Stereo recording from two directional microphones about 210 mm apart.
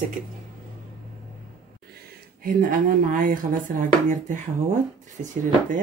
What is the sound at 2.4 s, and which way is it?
Speech, 40° right (ahead or behind).